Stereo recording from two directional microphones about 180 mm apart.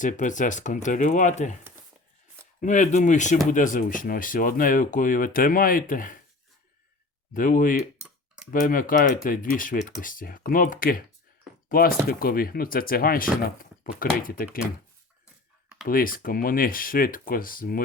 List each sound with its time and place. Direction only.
0.0 s speech: 45° left (ahead or behind)
2.6 s speech: 45° left (ahead or behind)
7.3 s speech: 50° left (ahead or behind)
13.4 s a sound: 50° left (ahead or behind)
14.2 s speech: 50° left (ahead or behind)
15.9 s speech: 50° left (ahead or behind)